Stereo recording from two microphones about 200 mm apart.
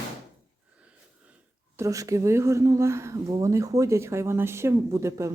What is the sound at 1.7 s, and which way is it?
Speech, 15° right (ahead or behind).